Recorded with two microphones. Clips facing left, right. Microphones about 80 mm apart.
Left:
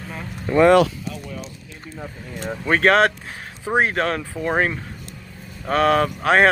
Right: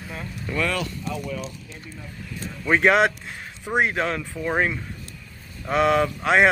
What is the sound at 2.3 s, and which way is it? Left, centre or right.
Speech, left.